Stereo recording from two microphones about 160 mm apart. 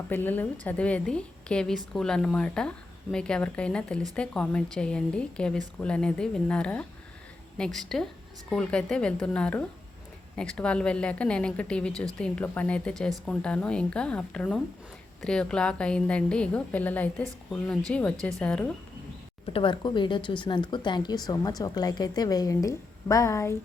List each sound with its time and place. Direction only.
0.1 s a woman's voice: 10° left (ahead or behind)
19.5 s a woman's voice: 30° left (ahead or behind)